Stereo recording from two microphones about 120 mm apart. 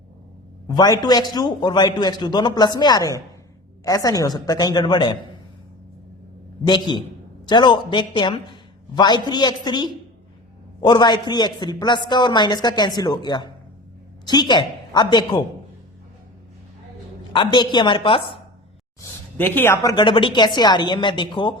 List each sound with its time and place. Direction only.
0.7 s speech: 35° left (ahead or behind)
6.7 s speech: 40° left (ahead or behind)
17.3 s speech: 40° left (ahead or behind)
19.4 s speech: 15° left (ahead or behind); by 21.5 s 40° left (ahead or behind)